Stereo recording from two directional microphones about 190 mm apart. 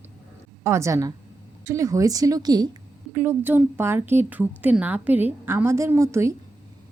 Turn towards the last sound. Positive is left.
turn(degrees=-15)  # may be behind; listen again after turning